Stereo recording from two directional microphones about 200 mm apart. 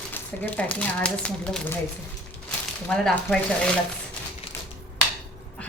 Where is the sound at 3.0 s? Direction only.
5° left (ahead or behind).